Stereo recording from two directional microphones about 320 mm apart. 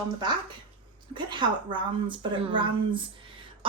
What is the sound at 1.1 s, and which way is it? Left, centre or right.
Speech, centre.